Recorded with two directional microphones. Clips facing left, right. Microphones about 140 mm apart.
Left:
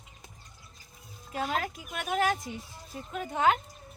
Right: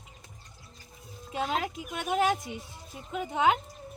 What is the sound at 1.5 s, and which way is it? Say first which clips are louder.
A woman's voice: right 1 dB; 20° right (ahead or behind).